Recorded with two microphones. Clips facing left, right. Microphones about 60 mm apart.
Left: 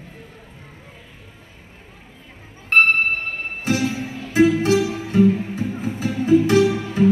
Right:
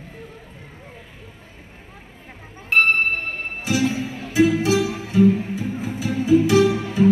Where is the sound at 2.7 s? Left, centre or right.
Left.